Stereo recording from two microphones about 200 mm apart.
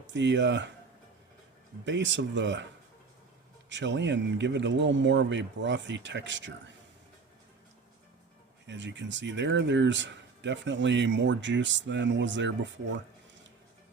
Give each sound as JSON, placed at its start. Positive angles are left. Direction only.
{"t": 0.1, "sound": "speech", "side_deg": -60}
{"t": 1.8, "sound": "speech", "side_deg": -65}
{"t": 3.7, "sound": "speech", "side_deg": -65}
{"t": 8.6, "sound": "speech", "side_deg": -65}